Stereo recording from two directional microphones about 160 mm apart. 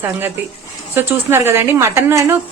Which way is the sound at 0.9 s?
15° right (ahead or behind).